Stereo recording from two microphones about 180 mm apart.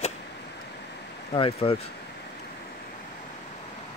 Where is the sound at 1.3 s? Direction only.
30° left (ahead or behind).